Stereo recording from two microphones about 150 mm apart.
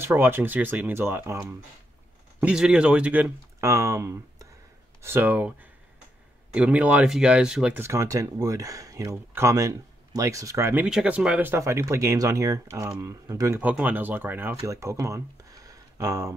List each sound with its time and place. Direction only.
0.0 s speech: 15° right (ahead or behind)
2.4 s speech: 5° right (ahead or behind)
7.8 s speech: 20° right (ahead or behind)
10.9 s speech: 5° right (ahead or behind); by 16.3 s 20° right (ahead or behind)